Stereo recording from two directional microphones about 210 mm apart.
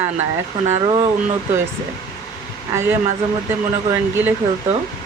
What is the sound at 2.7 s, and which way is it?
Speech, 10° right (ahead or behind).